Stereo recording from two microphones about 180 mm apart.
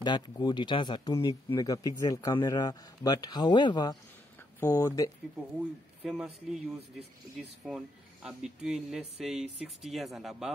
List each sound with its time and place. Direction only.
0.0 s speech: 25° left (ahead or behind)
4.6 s speech: 15° left (ahead or behind)
6.0 s speech: 5° right (ahead or behind)